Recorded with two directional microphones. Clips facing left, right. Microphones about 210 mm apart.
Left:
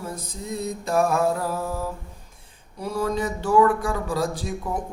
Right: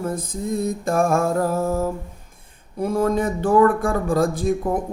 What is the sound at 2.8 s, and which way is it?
A man's voice, 50° right (ahead or behind).